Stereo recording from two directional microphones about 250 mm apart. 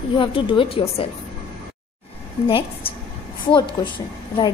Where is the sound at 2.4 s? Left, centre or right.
Left.